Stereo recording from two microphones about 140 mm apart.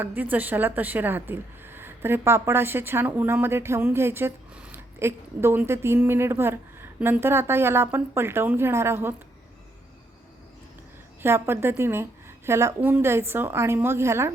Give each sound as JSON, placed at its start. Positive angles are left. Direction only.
{"t": 0.0, "sound": "a woman's voice", "side_deg": -15}
{"t": 11.2, "sound": "a woman's voice", "side_deg": -15}